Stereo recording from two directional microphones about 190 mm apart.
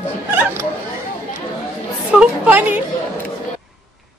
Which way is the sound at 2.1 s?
10° right (ahead or behind).